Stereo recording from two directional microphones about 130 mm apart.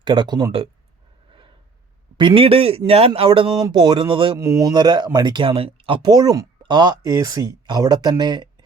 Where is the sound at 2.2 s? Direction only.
40° right (ahead or behind).